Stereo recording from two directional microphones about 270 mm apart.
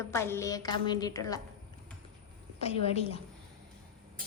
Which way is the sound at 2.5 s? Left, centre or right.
Left.